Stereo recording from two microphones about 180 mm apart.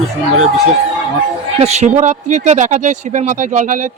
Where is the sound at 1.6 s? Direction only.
40° right (ahead or behind).